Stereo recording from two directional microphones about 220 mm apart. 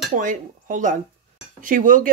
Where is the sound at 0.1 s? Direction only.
35° right (ahead or behind).